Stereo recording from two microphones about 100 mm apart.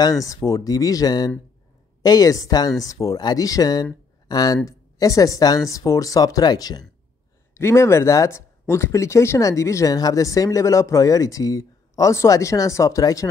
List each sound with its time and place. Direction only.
0.0 s a woman's voice: 35° left (ahead or behind)
7.5 s speech: 25° left (ahead or behind)